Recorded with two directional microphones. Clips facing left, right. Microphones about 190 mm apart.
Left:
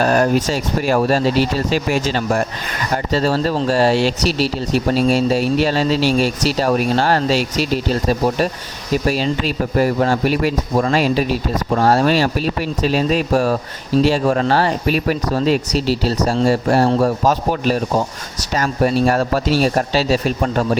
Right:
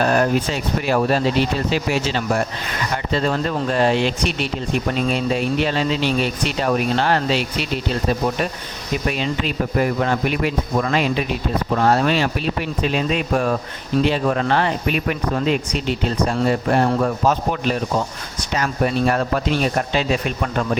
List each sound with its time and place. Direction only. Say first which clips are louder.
0.0 s speech: left 3 dB; 40° left (ahead or behind)